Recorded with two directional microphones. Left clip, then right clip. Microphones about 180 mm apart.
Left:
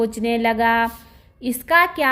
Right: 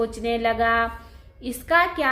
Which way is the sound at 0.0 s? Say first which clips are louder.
Left 3 dB; 40° left (ahead or behind).